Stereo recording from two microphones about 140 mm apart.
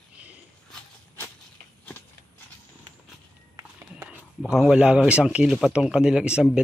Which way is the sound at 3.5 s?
20° right (ahead or behind).